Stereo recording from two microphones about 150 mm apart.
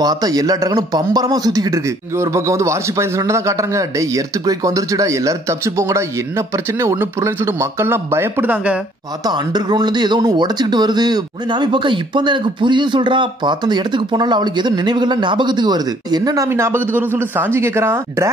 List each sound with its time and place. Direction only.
0.0 s speech: 25° right (ahead or behind)
9.2 s speech: 30° right (ahead or behind)